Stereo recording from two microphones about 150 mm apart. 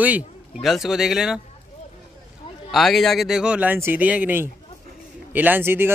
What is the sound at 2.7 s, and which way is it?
A man's voice, centre (ahead or behind).